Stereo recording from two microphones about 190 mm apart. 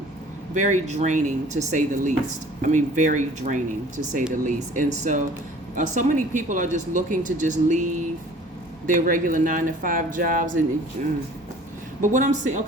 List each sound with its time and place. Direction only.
0.5 s speech: 40° right (ahead or behind)
8.9 s speech: 45° right (ahead or behind)